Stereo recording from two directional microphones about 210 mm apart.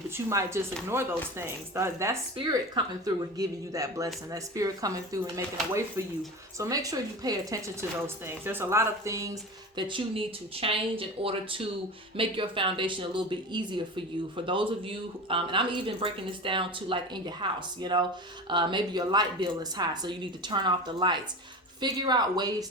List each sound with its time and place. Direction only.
0.3 s speech: 15° right (ahead or behind)
6.6 s speech: 15° right (ahead or behind)